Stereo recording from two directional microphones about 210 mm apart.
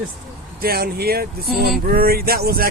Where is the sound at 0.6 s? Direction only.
45° right (ahead or behind).